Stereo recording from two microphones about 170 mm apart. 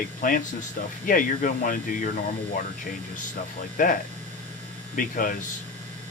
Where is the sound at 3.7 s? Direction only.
55° left (ahead or behind).